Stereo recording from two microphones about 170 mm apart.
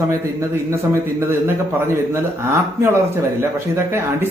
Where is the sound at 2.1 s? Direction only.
15° right (ahead or behind).